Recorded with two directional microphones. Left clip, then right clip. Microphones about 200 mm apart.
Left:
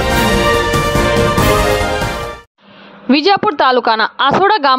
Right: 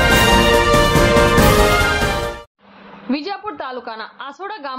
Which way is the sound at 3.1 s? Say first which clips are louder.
Left 13 dB; 50° left (ahead or behind).